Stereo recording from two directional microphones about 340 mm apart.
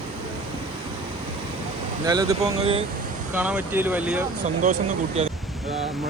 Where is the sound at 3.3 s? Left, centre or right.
Centre.